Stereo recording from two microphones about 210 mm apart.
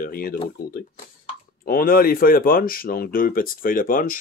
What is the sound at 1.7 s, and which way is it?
Speech, 45° left (ahead or behind).